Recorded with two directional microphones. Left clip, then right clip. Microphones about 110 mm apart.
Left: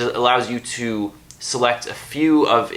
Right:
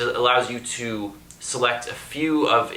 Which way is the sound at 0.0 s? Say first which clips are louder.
Left 2 dB; 30° left (ahead or behind).